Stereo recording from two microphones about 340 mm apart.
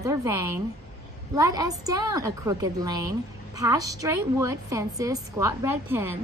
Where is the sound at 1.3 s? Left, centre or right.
Centre.